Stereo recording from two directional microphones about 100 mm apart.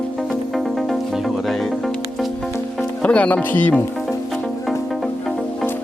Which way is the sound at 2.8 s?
15° left (ahead or behind).